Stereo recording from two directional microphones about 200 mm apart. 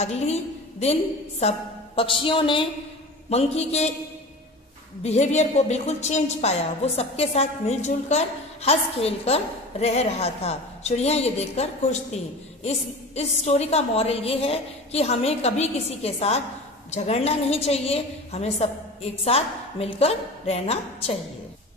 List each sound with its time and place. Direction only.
0.0 s a woman's voice: 35° left (ahead or behind)
2.0 s a woman's voice: 25° left (ahead or behind)
5.0 s a woman's voice: 35° left (ahead or behind)